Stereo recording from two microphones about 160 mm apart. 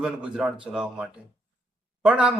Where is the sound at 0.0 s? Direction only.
5° right (ahead or behind).